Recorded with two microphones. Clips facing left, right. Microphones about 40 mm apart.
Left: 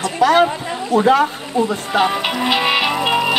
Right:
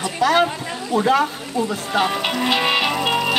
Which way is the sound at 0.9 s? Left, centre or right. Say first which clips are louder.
Left 4 dB; centre.